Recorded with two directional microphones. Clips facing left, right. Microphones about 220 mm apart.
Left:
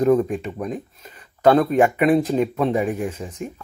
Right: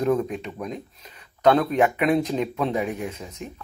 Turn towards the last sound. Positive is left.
turn(degrees=25)  # may be behind; listen again after turning